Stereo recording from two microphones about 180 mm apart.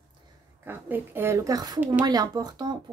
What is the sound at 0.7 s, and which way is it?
Speech, 10° right (ahead or behind).